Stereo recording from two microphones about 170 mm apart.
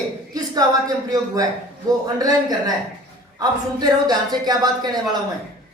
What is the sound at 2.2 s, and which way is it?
Speech, 20° right (ahead or behind).